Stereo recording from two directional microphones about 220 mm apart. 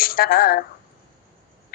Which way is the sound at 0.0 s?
40° left (ahead or behind).